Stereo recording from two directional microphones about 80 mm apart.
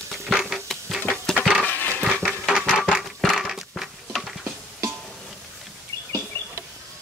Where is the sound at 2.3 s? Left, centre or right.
Centre.